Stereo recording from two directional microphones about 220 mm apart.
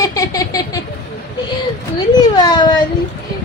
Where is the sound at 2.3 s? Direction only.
20° left (ahead or behind).